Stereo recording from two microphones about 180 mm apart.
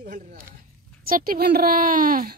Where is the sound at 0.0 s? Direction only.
50° right (ahead or behind).